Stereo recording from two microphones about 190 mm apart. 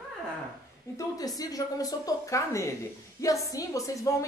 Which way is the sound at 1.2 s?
20° left (ahead or behind).